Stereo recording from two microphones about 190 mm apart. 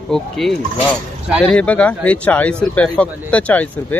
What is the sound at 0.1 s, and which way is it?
A man's voice, centre (ahead or behind).